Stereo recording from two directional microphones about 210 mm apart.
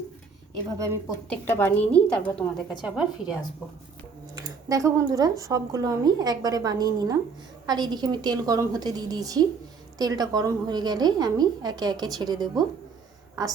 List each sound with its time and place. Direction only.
1.3 s a woman's voice: 10° left (ahead or behind)
4.4 s a woman's voice: 15° right (ahead or behind)